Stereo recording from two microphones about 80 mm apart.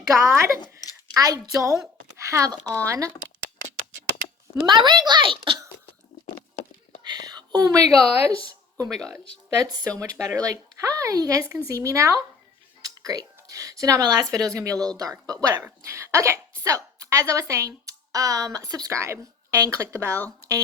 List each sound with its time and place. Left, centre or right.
0.1 s speech: right
2.1 s a sound: right
2.7 s speech: right
4.6 s a child's voice: right
7.3 s speech: right
10.0 s speech: right
15.9 s speech: right
19.0 s speech: right